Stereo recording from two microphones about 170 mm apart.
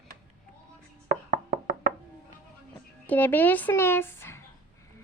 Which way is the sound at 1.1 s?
55° right (ahead or behind).